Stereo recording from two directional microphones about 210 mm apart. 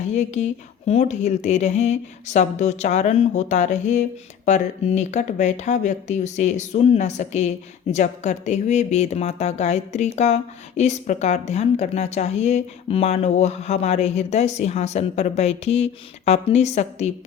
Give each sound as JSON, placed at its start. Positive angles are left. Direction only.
{"t": 0.1, "sound": "speech", "side_deg": 35}